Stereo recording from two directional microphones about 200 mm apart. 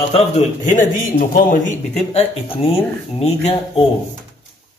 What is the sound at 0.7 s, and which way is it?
A man's voice, 40° left (ahead or behind).